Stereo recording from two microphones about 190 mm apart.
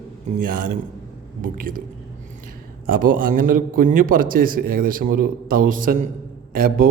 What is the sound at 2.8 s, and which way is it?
A man's voice, 45° right (ahead or behind).